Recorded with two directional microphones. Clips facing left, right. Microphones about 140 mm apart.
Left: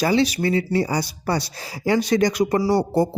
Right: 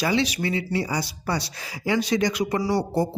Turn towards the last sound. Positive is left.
turn(degrees=45)  # may be behind; listen again after turning